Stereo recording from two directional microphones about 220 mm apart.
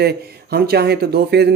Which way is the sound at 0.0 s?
45° right (ahead or behind).